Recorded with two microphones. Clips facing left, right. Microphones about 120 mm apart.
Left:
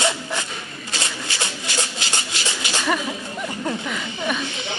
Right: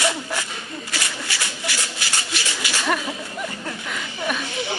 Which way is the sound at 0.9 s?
25° left (ahead or behind).